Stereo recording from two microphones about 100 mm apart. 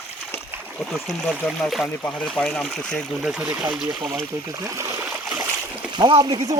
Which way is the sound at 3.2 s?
15° right (ahead or behind).